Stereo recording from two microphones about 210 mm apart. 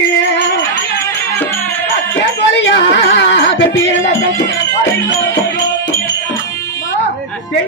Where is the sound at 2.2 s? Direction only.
55° left (ahead or behind).